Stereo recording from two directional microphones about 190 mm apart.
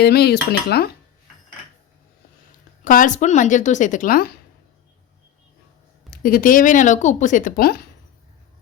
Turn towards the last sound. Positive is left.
turn(degrees=55)  # may be behind; listen again after turning